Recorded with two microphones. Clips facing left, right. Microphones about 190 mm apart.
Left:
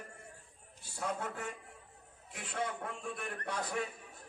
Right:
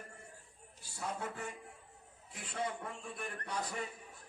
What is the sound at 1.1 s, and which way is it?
Speech, 60° left (ahead or behind).